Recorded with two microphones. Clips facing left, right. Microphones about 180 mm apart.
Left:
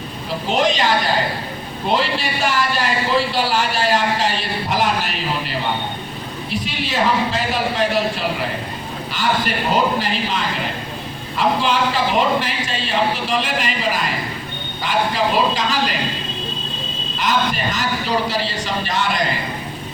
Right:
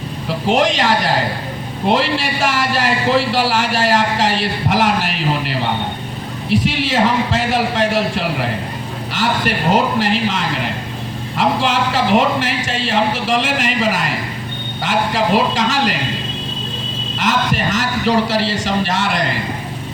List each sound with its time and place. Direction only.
0.4 s speech: 85° right
6.5 s speech: 85° right
9.7 s a man's voice: 80° right
17.2 s speech: 85° right